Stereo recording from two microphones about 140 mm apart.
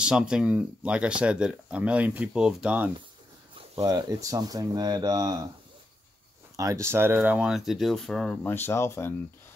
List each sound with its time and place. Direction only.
0.0 s speech: 5° right (ahead or behind)
3.7 s speech: 25° right (ahead or behind)
6.5 s speech: 25° right (ahead or behind); by 8.4 s 5° left (ahead or behind)
8.5 s speech: 15° left (ahead or behind)